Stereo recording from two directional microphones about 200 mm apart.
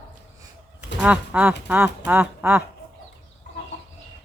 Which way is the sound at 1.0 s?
5° right (ahead or behind).